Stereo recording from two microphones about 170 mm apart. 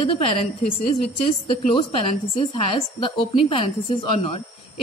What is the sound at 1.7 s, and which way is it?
A woman's voice, 35° left (ahead or behind).